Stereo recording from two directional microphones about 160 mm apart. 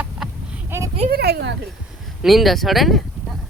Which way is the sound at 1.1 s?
90° right.